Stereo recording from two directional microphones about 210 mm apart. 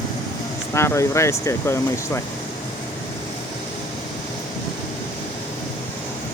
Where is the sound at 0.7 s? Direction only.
15° left (ahead or behind).